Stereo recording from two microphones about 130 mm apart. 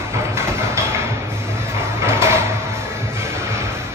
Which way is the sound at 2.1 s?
20° right (ahead or behind).